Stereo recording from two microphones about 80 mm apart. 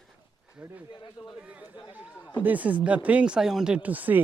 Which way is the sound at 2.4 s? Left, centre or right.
Centre.